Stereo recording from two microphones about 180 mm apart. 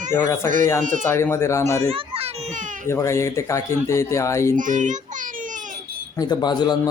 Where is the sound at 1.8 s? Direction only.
30° right (ahead or behind).